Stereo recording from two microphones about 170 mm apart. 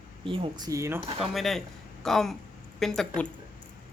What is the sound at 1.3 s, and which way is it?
Speech, centre (ahead or behind).